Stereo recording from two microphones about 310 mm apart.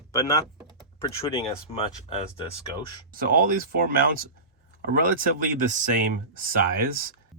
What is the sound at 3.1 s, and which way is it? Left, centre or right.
Speech, right.